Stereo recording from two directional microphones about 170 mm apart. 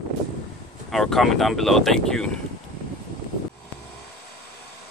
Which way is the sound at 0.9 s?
Centre (ahead or behind).